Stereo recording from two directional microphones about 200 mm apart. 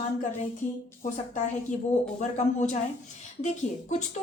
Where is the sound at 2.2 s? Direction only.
35° left (ahead or behind).